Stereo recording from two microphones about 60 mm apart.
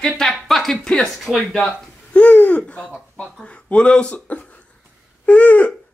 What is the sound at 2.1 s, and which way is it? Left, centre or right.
Speech, left.